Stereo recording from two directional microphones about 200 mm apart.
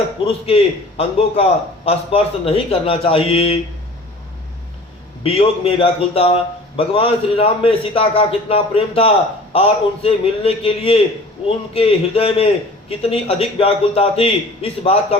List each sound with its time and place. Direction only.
0.3 s a man's voice: 30° left (ahead or behind)
5.2 s a man's voice: 30° left (ahead or behind)